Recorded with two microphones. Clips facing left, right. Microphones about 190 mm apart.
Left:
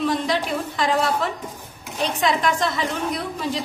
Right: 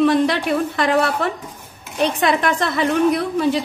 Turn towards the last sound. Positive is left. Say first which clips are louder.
# right 8 dB
turn(degrees=-65)  # may be behind; listen again after turning